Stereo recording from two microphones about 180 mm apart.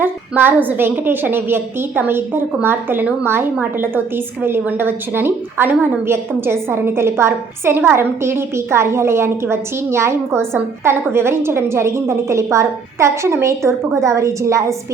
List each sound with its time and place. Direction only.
0.0 s a woman's voice: 10° right (ahead or behind)